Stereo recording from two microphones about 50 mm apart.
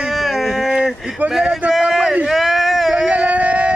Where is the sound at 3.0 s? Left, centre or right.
Right.